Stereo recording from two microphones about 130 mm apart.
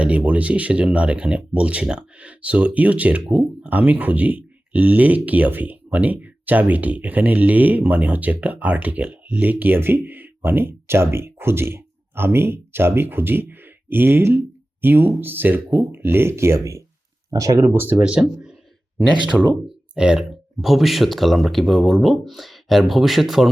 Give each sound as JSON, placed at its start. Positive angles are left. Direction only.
{"t": 0.0, "sound": "speech", "side_deg": -10}